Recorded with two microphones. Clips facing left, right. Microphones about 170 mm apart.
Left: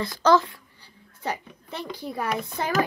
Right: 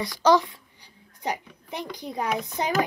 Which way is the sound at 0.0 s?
15° right (ahead or behind).